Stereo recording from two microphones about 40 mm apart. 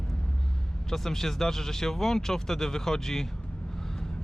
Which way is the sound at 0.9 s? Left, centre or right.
Centre.